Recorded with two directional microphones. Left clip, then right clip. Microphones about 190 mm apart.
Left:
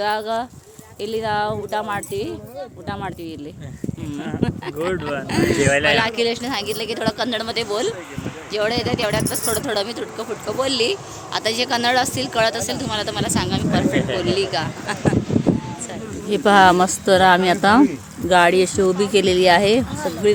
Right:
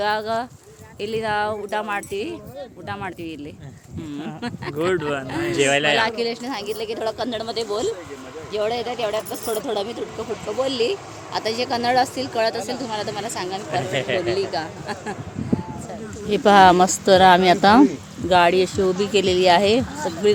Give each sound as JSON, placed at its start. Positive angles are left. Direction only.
{"t": 0.0, "sound": "speech", "side_deg": -5}
{"t": 4.4, "sound": "speech", "side_deg": 5}
{"t": 4.8, "sound": "speech", "side_deg": -45}
{"t": 5.3, "sound": "speech", "side_deg": 5}
{"t": 5.6, "sound": "speech", "side_deg": -60}
{"t": 5.9, "sound": "speech", "side_deg": 15}
{"t": 16.3, "sound": "speech", "side_deg": 0}
{"t": 18.3, "sound": "speech", "side_deg": 5}